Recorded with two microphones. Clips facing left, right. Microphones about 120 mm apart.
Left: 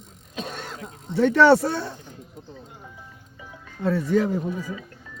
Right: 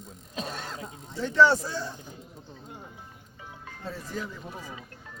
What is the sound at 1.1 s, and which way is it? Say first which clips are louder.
Speech: left 6 dB; 65° left (ahead or behind).